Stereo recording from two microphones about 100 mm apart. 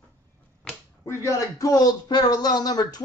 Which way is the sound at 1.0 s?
30° left (ahead or behind).